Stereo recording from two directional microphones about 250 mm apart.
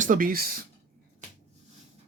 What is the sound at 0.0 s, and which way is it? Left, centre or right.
Speech, right.